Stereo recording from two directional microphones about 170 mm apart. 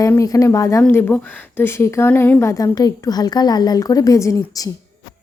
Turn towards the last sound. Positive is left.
turn(degrees=20)  # may be behind; listen again after turning